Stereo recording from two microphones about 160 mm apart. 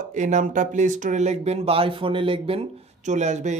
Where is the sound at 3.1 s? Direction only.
45° right (ahead or behind).